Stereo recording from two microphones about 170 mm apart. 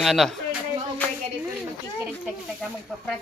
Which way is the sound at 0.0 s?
Centre (ahead or behind).